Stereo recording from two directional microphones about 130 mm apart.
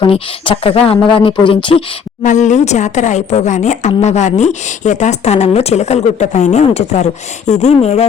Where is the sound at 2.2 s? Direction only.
70° left (ahead or behind).